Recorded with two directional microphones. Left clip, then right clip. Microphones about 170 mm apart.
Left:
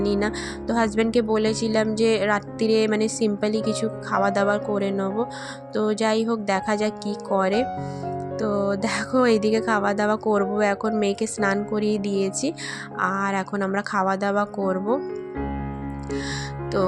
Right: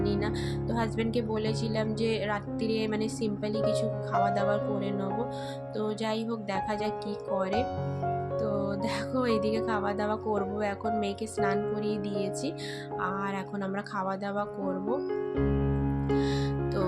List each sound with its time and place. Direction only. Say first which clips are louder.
0.0 s speech: left 6 dB; 50° left (ahead or behind)